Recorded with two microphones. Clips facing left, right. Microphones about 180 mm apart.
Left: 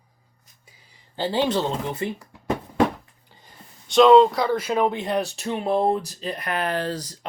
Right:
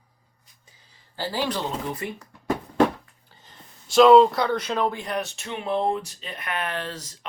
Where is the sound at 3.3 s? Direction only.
10° left (ahead or behind).